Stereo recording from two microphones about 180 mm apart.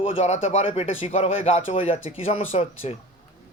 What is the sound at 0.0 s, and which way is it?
A man's voice, 35° left (ahead or behind).